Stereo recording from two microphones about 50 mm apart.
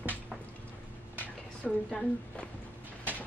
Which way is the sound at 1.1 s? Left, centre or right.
Left.